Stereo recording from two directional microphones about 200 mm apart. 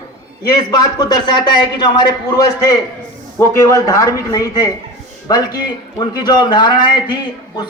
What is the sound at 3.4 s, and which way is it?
Speech, 15° left (ahead or behind).